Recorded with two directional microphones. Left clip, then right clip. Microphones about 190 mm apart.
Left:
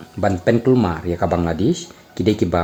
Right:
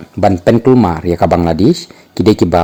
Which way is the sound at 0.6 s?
35° right (ahead or behind).